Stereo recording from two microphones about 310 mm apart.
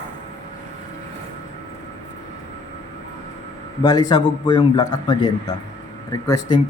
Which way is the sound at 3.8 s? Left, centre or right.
Centre.